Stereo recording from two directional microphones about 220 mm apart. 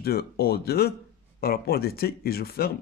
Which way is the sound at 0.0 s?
45° left (ahead or behind).